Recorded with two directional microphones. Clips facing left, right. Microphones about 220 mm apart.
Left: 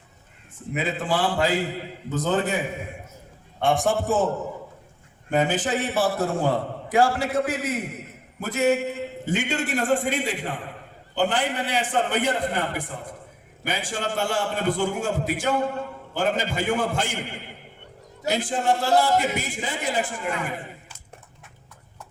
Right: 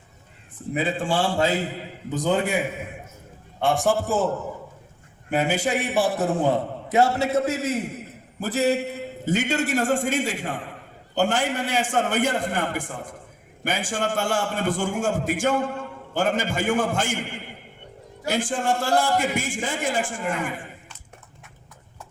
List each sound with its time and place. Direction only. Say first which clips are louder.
0.7 s a man's voice: right 1 dB; 30° right (ahead or behind)
2.0 s a man's voice: right 1 dB; 15° right (ahead or behind)
3.6 s a man's voice: even; centre (ahead or behind)
5.3 s a man's voice: even; 10° right (ahead or behind); by 17.2 s 50° right (ahead or behind)
18.3 s a man's voice: left 1 dB; 50° right (ahead or behind)